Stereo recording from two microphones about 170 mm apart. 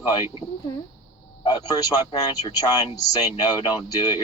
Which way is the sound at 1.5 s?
25° left (ahead or behind).